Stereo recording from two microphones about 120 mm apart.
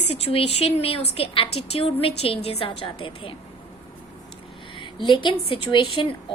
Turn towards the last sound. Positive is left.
turn(degrees=45)  # may be behind; listen again after turning